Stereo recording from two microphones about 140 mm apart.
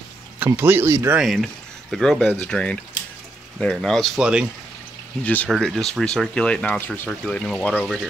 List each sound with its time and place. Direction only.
0.5 s speech: 15° right (ahead or behind)
1.2 s speech: centre (ahead or behind)
5.2 s speech: 10° left (ahead or behind)